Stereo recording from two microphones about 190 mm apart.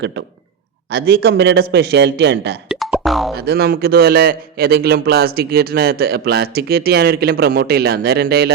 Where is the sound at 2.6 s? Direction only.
Centre (ahead or behind).